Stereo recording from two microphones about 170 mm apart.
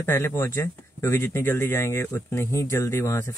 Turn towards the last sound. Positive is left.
turn(degrees=15)  # may be behind; listen again after turning